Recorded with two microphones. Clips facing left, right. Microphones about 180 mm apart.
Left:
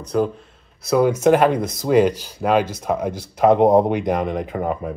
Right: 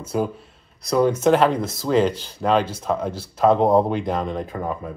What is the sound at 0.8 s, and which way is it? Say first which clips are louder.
Speech: left 2 dB; 10° left (ahead or behind).